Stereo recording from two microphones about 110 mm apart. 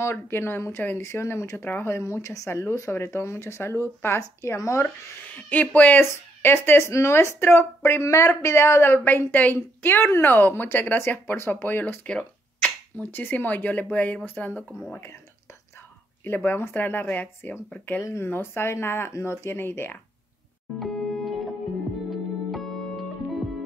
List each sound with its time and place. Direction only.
0.0 s speech: 25° left (ahead or behind)
4.8 s speech: 15° left (ahead or behind)
16.3 s speech: 15° left (ahead or behind)
20.8 s music: centre (ahead or behind)